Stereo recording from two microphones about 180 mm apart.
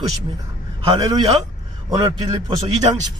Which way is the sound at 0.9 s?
20° right (ahead or behind).